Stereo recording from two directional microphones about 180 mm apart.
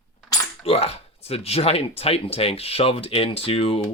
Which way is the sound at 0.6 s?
35° left (ahead or behind).